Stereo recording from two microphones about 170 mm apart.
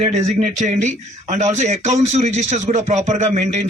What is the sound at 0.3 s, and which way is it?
A man's voice, 45° right (ahead or behind).